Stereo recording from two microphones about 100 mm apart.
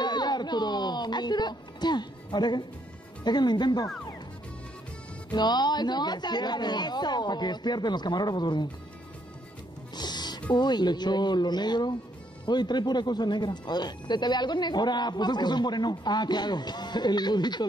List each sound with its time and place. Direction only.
0.0 s music: 45° left (ahead or behind)
3.3 s speech: 45° left (ahead or behind)
5.3 s speech: 45° left (ahead or behind)
9.9 s music: 45° left (ahead or behind)
10.5 s speech: 45° left (ahead or behind)